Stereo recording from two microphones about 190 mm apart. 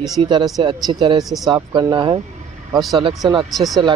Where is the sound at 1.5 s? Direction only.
20° right (ahead or behind).